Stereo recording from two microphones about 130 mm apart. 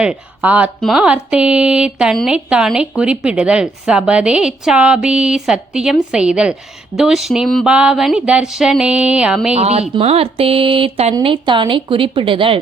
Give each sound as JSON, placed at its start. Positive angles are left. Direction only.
{"t": 0.0, "sound": "speech", "side_deg": -10}
{"t": 9.6, "sound": "a woman's voice", "side_deg": -55}